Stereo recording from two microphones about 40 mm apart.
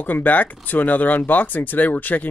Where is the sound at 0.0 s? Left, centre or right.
Left.